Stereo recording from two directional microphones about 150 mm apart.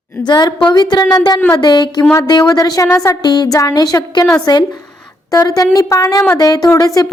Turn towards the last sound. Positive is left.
turn(degrees=25)  # may be behind; listen again after turning